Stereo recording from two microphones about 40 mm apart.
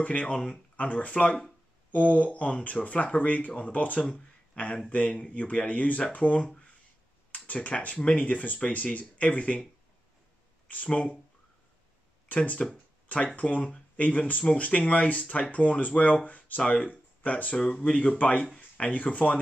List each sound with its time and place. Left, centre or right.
0.0 s speech: left
4.1 s a sound: left
4.9 s speech: left
6.4 s speech: left
7.3 s speech: left
12.3 s speech: left
17.6 s speech: left